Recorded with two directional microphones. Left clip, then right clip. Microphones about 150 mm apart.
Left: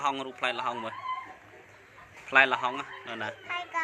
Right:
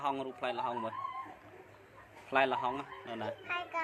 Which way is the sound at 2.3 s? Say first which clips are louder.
Left 7 dB; 5° right (ahead or behind).